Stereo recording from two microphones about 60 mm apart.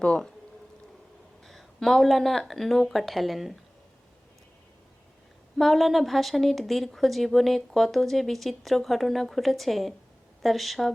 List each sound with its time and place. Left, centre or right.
0.0 s speech: centre
1.5 s speech: centre
5.5 s speech: centre